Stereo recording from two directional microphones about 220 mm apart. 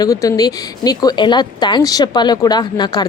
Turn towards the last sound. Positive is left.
turn(degrees=20)  # may be behind; listen again after turning